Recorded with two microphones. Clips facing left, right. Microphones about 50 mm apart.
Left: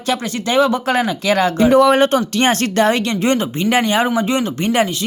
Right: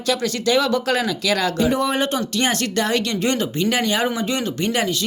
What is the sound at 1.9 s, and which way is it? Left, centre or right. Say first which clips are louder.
Speech: left 7 dB; left.